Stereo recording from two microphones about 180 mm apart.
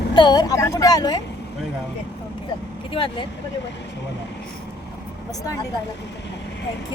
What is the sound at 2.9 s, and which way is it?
Speech, 30° left (ahead or behind).